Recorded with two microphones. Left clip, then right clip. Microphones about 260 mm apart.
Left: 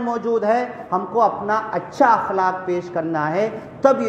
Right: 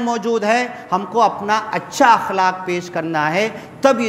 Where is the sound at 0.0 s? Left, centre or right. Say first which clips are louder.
Right 2 dB; right.